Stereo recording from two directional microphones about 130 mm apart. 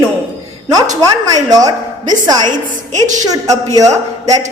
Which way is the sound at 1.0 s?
30° right (ahead or behind).